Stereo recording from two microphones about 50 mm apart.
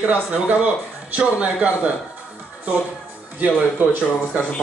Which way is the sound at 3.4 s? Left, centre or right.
Right.